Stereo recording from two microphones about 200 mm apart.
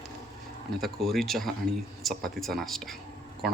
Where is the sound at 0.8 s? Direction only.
Centre (ahead or behind).